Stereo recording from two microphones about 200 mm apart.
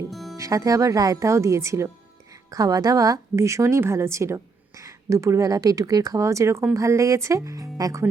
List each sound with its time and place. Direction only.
0.1 s music: centre (ahead or behind)
0.3 s a woman's voice: 15° right (ahead or behind)